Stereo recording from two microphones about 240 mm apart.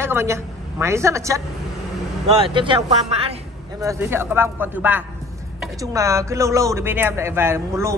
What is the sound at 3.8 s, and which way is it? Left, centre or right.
Speech, centre.